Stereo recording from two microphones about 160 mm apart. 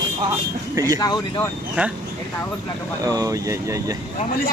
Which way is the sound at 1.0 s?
25° left (ahead or behind).